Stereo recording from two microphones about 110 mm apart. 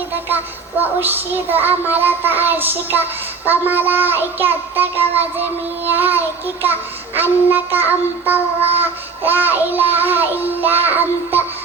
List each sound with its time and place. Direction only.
0.3 s child singing: 15° right (ahead or behind)